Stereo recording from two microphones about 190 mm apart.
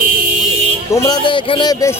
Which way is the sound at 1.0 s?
25° left (ahead or behind).